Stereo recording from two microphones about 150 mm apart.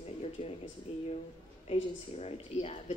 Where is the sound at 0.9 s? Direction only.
40° left (ahead or behind).